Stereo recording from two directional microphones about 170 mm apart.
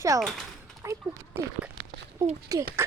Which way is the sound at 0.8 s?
15° right (ahead or behind).